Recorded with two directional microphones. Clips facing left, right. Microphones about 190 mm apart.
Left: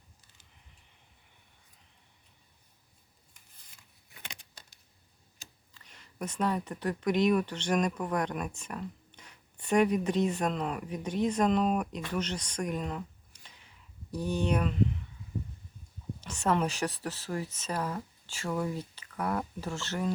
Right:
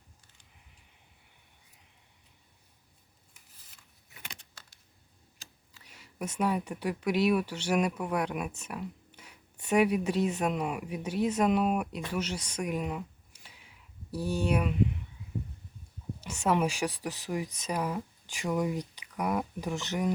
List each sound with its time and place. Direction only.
4.3 s keys jangling: 20° left (ahead or behind)
5.7 s speech: 10° right (ahead or behind)
16.2 s speech: 10° right (ahead or behind)